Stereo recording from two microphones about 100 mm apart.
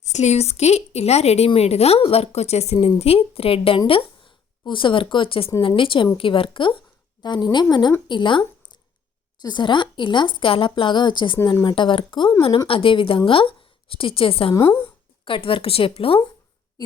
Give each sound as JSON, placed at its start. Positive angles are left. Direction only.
{"t": 0.3, "sound": "a woman's voice", "side_deg": 90}
{"t": 14.5, "sound": "a woman's voice", "side_deg": 25}
{"t": 15.2, "sound": "a woman's voice", "side_deg": 60}